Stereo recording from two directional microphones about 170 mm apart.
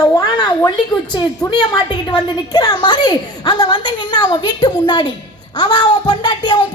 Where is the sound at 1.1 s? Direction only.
25° left (ahead or behind).